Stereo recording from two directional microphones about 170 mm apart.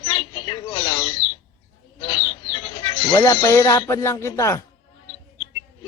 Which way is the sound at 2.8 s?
25° left (ahead or behind).